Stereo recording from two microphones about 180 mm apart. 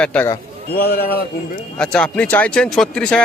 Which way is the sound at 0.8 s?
60° left (ahead or behind).